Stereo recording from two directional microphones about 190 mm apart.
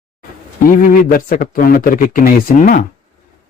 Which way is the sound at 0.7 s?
45° left (ahead or behind).